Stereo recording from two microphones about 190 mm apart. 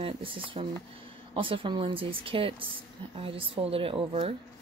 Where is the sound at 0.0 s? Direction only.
25° right (ahead or behind).